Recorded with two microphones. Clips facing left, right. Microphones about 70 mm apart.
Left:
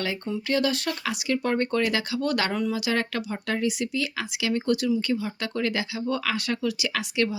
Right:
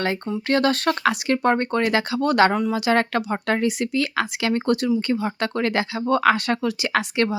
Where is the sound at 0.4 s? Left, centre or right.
Right.